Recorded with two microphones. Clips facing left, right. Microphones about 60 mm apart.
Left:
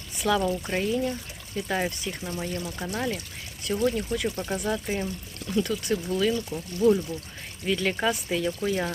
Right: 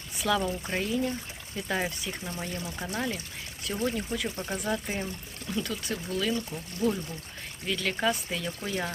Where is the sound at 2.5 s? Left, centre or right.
Centre.